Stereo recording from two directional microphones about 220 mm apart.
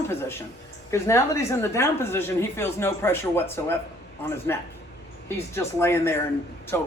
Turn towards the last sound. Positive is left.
turn(degrees=10)  # may be behind; listen again after turning